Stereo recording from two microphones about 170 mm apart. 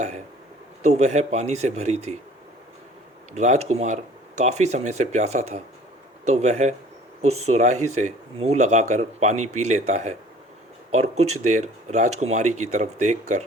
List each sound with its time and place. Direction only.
0.8 s speech: 40° right (ahead or behind)
3.3 s speech: 40° right (ahead or behind)